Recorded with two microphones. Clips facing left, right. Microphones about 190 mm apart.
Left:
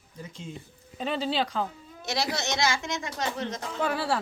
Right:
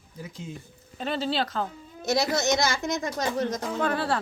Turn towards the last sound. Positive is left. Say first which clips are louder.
# right 2 dB
turn(degrees=5)  # may be behind; listen again after turning